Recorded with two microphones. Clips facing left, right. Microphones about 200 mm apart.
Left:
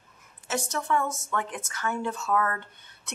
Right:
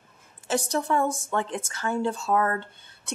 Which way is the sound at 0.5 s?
35° right (ahead or behind).